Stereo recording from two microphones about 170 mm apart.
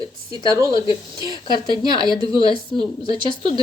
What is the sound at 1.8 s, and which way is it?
Speech, 25° right (ahead or behind).